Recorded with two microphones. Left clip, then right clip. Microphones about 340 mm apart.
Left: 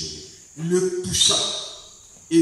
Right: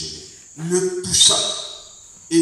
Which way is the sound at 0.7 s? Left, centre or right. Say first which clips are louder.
Right 1 dB; centre.